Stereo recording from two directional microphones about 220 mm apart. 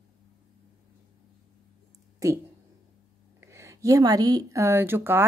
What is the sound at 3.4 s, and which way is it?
Speech, 10° right (ahead or behind).